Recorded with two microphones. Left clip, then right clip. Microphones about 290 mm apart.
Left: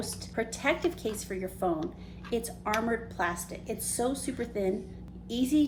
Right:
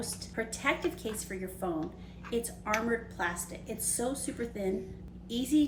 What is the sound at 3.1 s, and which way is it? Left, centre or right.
A woman's voice, centre.